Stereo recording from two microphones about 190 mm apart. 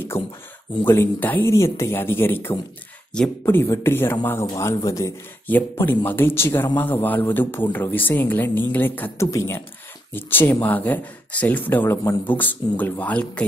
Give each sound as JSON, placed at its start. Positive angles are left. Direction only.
{"t": 0.8, "sound": "speech", "side_deg": 10}